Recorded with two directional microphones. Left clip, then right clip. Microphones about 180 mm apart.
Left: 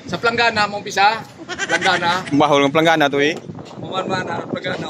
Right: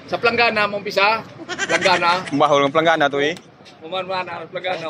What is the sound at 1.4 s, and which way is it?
Speech, centre (ahead or behind).